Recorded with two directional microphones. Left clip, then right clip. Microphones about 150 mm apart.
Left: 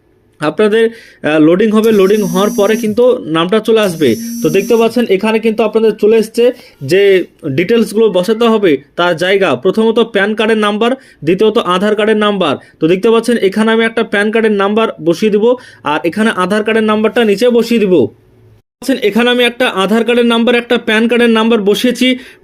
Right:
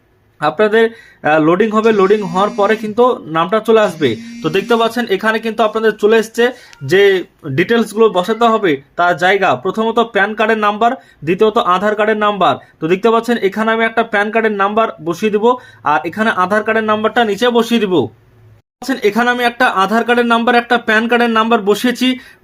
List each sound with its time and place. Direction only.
0.4 s speech: 30° left (ahead or behind)
4.4 s speech: 10° left (ahead or behind)
8.3 s speech: 30° left (ahead or behind); by 18.0 s 15° left (ahead or behind)
19.0 s speech: 15° left (ahead or behind)